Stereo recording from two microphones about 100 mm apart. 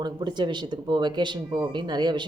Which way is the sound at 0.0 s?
50° right (ahead or behind).